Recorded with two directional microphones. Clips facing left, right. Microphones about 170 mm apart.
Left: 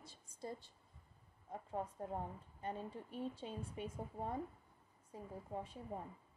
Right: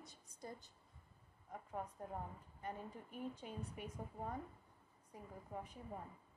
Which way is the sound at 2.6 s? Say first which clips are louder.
Left 3 dB; 25° left (ahead or behind).